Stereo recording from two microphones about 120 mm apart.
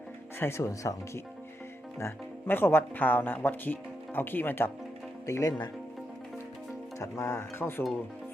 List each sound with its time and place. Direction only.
0.3 s speech: 20° left (ahead or behind)
7.0 s speech: 25° left (ahead or behind)